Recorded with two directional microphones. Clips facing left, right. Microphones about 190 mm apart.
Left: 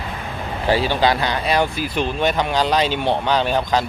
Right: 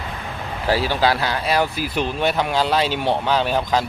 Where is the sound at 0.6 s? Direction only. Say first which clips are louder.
Left 1 dB; 5° right (ahead or behind).